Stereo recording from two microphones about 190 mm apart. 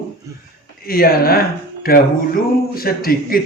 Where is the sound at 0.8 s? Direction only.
50° left (ahead or behind).